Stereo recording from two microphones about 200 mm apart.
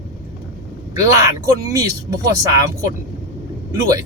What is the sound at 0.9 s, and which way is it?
Speech, 15° right (ahead or behind).